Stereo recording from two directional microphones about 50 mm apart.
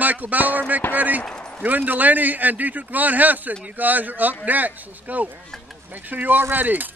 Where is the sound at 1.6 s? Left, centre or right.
Right.